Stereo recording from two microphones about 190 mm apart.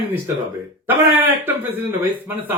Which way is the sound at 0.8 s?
10° right (ahead or behind).